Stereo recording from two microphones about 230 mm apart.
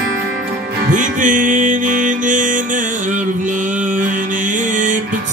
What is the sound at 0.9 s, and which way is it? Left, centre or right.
Music, right.